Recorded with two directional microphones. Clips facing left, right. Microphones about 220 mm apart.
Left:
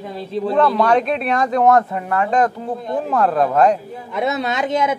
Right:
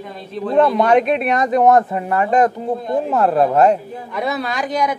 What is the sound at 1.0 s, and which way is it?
Speech, 5° right (ahead or behind).